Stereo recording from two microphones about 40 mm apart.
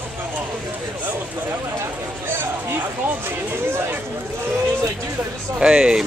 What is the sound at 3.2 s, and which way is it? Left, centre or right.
Speech, right.